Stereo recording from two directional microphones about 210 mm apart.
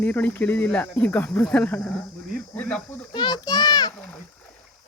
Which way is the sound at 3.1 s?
20° left (ahead or behind).